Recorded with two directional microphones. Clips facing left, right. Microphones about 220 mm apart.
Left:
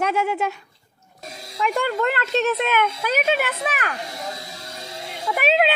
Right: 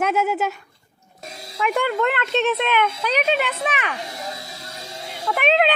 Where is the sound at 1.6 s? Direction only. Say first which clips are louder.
Right 1 dB; 5° right (ahead or behind).